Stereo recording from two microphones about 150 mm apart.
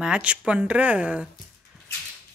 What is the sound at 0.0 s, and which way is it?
Speech, 5° right (ahead or behind).